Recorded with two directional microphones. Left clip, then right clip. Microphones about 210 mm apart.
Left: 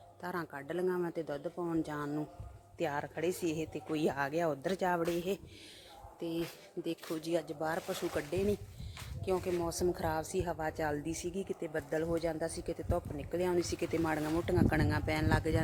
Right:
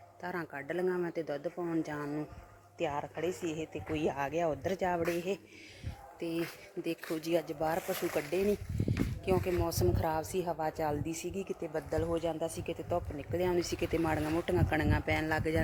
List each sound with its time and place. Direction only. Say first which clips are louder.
0.2 s a woman's voice: right 1 dB; centre (ahead or behind)
6.1 s a woman's voice: right 2 dB; 5° right (ahead or behind)